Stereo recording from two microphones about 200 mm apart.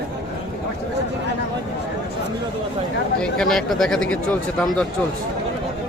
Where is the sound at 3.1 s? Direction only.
5° left (ahead or behind).